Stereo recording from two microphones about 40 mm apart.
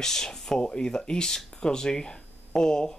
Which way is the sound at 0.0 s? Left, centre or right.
Centre.